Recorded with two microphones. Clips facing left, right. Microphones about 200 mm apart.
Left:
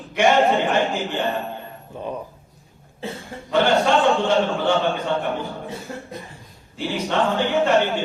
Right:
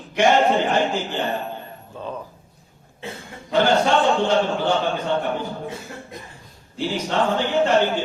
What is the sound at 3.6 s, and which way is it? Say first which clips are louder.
A man's voice: left 1 dB; centre (ahead or behind).